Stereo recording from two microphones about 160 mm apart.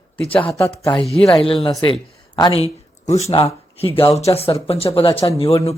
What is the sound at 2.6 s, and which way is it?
Speech, 40° left (ahead or behind).